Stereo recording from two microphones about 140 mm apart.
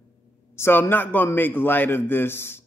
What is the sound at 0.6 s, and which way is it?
Speech, 15° left (ahead or behind).